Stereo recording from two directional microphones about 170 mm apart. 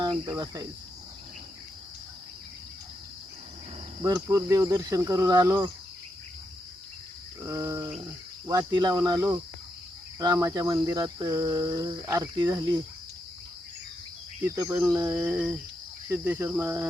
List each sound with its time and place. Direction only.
0.0 s cricket: 25° right (ahead or behind)
4.0 s cricket: 20° right (ahead or behind)
7.4 s cricket: 20° right (ahead or behind)
14.4 s cricket: 20° right (ahead or behind)